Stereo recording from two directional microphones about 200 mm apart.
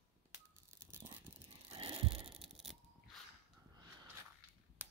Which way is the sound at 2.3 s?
Centre (ahead or behind).